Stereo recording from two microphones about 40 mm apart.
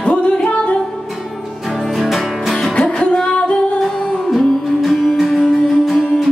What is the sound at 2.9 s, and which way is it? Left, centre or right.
Music, left.